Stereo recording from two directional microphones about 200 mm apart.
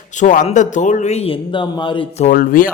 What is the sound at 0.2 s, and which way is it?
Speech, 40° left (ahead or behind).